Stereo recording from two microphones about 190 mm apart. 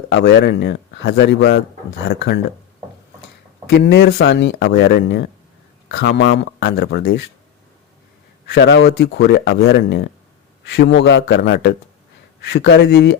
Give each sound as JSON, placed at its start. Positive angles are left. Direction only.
{"t": 0.1, "sound": "speech", "side_deg": 65}
{"t": 2.0, "sound": "speech", "side_deg": 60}
{"t": 3.7, "sound": "speech", "side_deg": 60}
{"t": 4.7, "sound": "speech", "side_deg": 55}
{"t": 8.5, "sound": "speech", "side_deg": 65}